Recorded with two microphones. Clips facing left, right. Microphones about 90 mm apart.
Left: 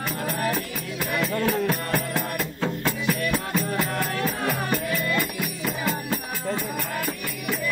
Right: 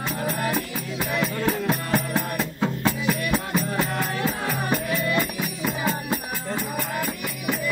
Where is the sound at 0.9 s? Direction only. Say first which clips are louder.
Even; 15° right (ahead or behind).